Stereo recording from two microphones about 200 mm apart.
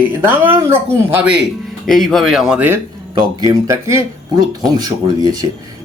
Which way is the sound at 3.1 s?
20° right (ahead or behind).